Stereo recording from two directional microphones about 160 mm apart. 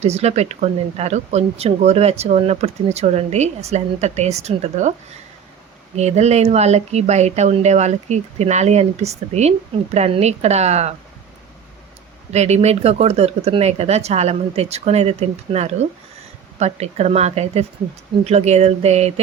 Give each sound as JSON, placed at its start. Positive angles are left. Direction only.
{"t": 0.0, "sound": "speech", "side_deg": -40}
{"t": 6.0, "sound": "speech", "side_deg": -45}
{"t": 12.3, "sound": "speech", "side_deg": -45}